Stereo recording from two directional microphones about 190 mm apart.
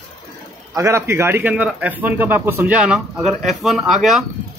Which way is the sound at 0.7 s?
15° right (ahead or behind).